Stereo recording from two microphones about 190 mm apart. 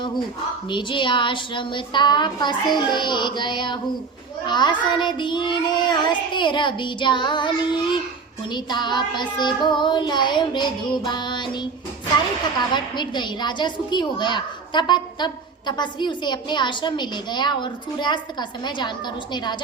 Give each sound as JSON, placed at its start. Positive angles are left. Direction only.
{"t": 0.7, "sound": "a woman's voice", "side_deg": 25}